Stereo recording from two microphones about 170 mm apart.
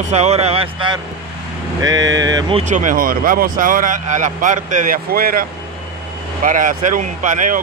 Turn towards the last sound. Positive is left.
turn(degrees=-50)  # may be behind; listen again after turning